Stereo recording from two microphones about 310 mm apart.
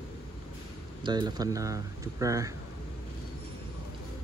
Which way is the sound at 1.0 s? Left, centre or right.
Centre.